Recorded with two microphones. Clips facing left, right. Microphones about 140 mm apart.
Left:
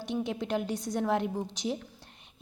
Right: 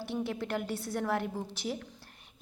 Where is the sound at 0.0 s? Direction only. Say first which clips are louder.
Left 2 dB; 20° left (ahead or behind).